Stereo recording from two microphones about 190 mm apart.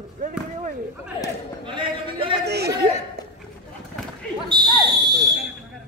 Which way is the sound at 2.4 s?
60° right (ahead or behind).